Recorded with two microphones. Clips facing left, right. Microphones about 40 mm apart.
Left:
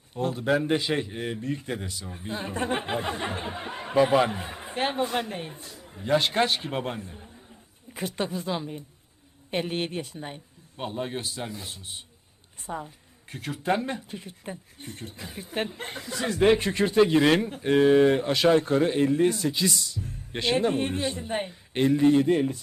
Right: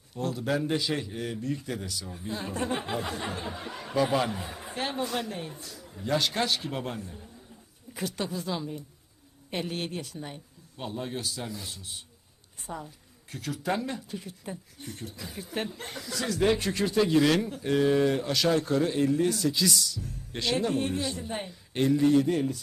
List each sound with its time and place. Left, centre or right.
0.1 s a woman's voice: left